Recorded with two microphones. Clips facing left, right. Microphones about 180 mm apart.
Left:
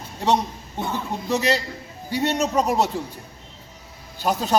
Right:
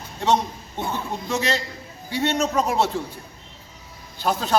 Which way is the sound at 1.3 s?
35° left (ahead or behind).